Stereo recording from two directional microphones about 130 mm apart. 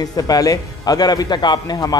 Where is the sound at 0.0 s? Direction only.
30° left (ahead or behind).